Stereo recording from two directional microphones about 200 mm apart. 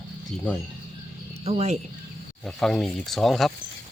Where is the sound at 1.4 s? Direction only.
30° right (ahead or behind).